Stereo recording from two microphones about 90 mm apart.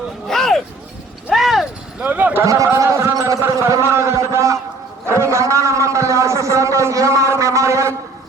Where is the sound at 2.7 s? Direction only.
30° right (ahead or behind).